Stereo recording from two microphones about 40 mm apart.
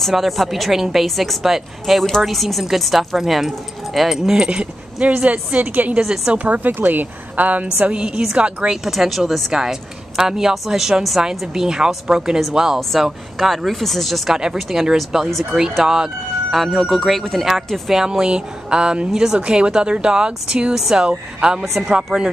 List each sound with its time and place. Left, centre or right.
0.1 s a woman's voice: centre
4.4 s speech: right
5.1 s a woman's voice: right
5.9 s a woman's voice: centre
6.3 s a woman's voice: right
7.9 s speech: right
8.8 s speech: centre
9.5 s a woman's voice: centre
14.3 s a woman's voice: centre
15.0 s speech: centre
15.8 s a woman's voice: centre
16.6 s speech: centre
17.8 s speech: centre